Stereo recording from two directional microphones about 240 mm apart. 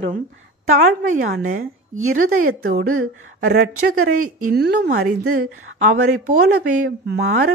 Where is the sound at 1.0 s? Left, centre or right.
Right.